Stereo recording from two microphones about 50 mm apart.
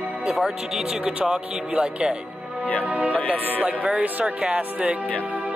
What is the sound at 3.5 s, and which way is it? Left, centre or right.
Music, right.